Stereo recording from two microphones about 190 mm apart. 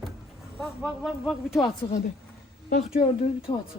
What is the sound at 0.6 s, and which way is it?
A man's voice, centre (ahead or behind).